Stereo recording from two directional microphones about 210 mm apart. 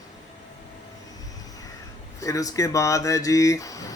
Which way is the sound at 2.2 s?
15° left (ahead or behind).